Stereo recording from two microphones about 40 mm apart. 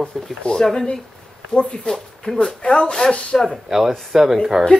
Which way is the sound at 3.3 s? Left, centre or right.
Centre.